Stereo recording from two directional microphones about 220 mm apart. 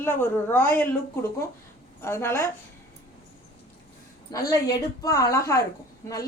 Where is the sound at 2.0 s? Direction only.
10° left (ahead or behind).